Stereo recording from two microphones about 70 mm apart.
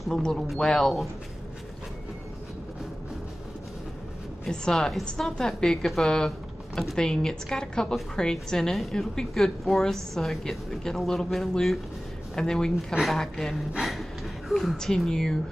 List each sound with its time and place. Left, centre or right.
0.0 s speech: centre
4.5 s a woman's voice: centre